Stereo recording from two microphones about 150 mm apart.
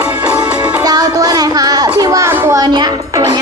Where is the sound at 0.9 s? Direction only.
25° right (ahead or behind).